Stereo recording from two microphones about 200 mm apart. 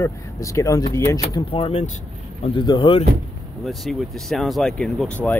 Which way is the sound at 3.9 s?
Centre (ahead or behind).